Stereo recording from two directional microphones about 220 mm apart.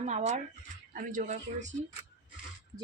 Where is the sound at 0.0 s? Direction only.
30° right (ahead or behind).